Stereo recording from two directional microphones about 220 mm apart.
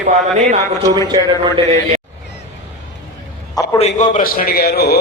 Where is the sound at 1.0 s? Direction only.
20° right (ahead or behind).